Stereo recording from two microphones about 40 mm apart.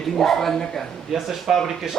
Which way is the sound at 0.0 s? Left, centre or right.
Centre.